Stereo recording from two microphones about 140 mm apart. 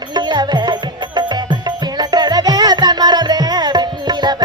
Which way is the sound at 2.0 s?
30° right (ahead or behind).